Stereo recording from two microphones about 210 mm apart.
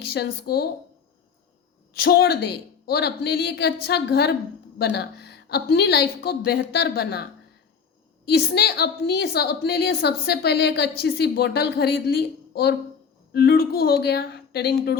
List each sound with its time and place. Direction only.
0.0 s a woman's voice: 50° left (ahead or behind)
1.9 s a woman's voice: 45° left (ahead or behind)
8.3 s a woman's voice: 50° left (ahead or behind)